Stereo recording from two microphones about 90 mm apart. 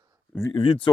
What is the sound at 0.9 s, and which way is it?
Speech, 50° left (ahead or behind).